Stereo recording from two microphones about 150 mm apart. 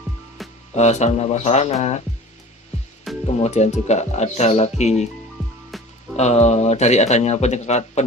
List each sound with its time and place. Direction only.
0.7 s speech: 50° left (ahead or behind)
3.2 s speech: 45° left (ahead or behind)
5.7 s music: centre (ahead or behind)
6.1 s speech: 45° left (ahead or behind)